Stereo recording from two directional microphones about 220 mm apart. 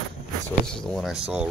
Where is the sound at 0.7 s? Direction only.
Centre (ahead or behind).